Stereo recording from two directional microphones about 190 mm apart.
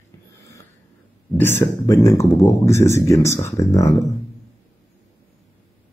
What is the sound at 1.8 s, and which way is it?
Speech, 15° left (ahead or behind).